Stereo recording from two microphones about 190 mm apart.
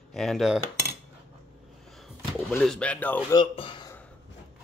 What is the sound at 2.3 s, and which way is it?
Speech, centre (ahead or behind).